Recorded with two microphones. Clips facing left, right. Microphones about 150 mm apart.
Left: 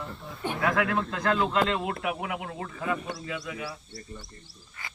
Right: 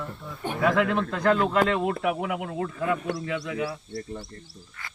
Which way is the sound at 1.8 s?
50° right (ahead or behind).